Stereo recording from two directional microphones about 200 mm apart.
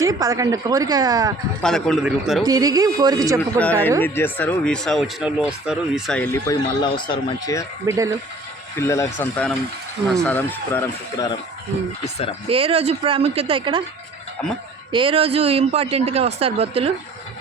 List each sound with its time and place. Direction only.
0.0 s a woman's voice: 15° right (ahead or behind)
1.6 s a man's voice: centre (ahead or behind)
2.4 s a woman's voice: 20° right (ahead or behind)
3.6 s speech: 10° left (ahead or behind)
7.9 s a woman's voice: 15° right (ahead or behind)
8.8 s speech: 15° left (ahead or behind)
12.5 s speech: 30° right (ahead or behind)
14.9 s speech: 25° right (ahead or behind)